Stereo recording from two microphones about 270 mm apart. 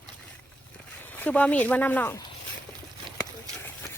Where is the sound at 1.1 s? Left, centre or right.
Centre.